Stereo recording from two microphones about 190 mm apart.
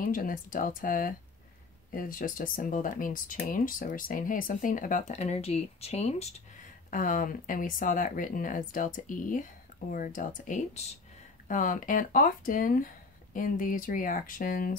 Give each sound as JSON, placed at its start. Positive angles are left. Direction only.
{"t": 0.0, "sound": "speech", "side_deg": 45}